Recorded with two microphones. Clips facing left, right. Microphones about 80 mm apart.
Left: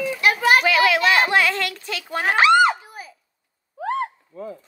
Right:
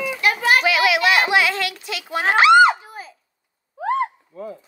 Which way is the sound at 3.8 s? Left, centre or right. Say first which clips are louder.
Right 3 dB; right.